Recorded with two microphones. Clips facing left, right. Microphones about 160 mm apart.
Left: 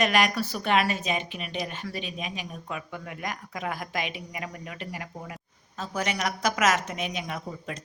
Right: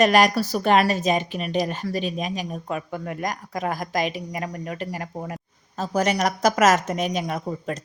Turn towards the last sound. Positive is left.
turn(degrees=-45)  # may be behind; listen again after turning